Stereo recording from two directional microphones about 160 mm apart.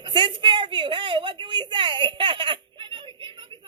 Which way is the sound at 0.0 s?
30° right (ahead or behind).